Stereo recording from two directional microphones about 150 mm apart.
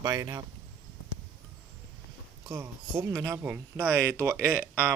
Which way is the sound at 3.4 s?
10° right (ahead or behind).